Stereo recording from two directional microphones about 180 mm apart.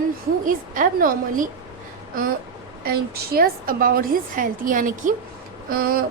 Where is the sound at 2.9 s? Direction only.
60° right (ahead or behind).